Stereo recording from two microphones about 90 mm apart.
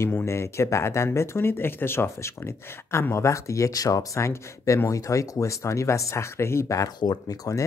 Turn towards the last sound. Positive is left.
turn(degrees=45)  # may be behind; listen again after turning